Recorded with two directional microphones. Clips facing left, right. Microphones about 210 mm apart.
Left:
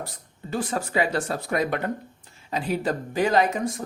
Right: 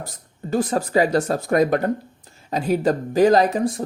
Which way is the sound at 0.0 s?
45° right (ahead or behind).